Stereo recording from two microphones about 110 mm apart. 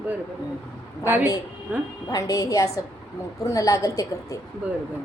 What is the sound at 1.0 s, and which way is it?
Speech, 20° right (ahead or behind).